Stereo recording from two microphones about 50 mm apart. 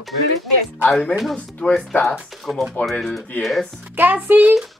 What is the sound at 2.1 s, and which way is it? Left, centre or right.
A woman's voice, centre.